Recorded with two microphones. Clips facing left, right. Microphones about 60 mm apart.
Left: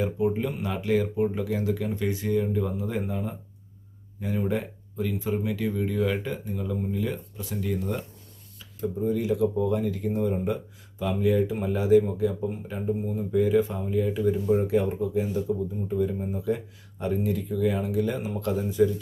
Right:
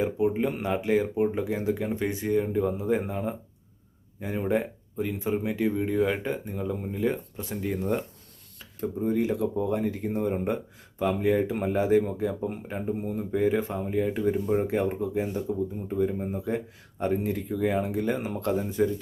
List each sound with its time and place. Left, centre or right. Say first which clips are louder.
0.6 s speech: even; right
8.5 s speech: left 1 dB; right